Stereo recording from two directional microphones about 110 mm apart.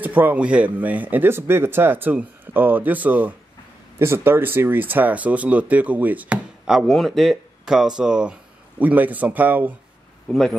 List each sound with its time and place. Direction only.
0.0 s speech: 15° right (ahead or behind)
10.2 s a man's voice: 5° left (ahead or behind)